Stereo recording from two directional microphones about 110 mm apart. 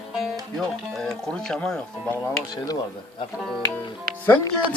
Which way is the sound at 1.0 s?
5° left (ahead or behind).